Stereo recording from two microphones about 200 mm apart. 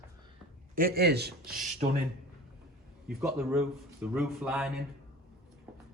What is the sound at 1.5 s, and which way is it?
Speech, 40° right (ahead or behind).